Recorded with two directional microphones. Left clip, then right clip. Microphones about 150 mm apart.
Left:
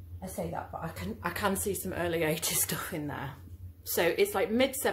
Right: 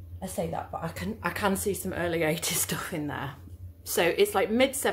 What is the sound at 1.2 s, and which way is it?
Speech, 15° right (ahead or behind).